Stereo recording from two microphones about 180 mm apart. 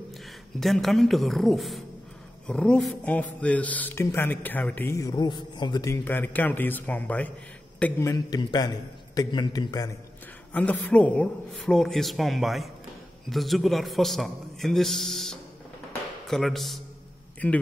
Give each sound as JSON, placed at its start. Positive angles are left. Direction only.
{"t": 0.6, "sound": "a man's voice", "side_deg": 0}
{"t": 10.5, "sound": "a man's voice", "side_deg": 5}